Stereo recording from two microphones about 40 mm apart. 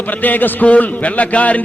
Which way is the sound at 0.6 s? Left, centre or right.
Left.